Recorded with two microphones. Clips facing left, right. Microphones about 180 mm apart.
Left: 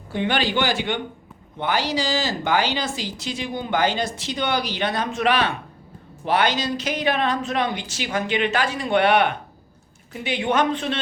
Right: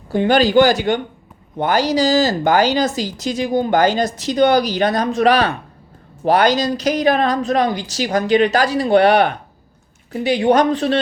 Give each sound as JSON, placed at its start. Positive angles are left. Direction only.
{"t": 0.1, "sound": "speech", "side_deg": -40}